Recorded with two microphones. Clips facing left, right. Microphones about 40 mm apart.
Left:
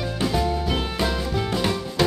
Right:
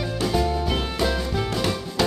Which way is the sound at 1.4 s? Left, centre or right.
Centre.